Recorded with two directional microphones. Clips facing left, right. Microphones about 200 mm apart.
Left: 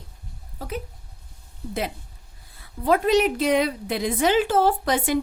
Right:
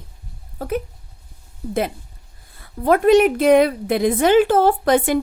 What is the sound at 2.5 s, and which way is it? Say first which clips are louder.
A woman's voice: right 4 dB; 50° right (ahead or behind).